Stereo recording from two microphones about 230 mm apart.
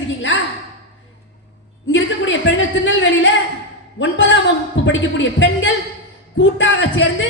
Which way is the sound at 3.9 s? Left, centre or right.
Left.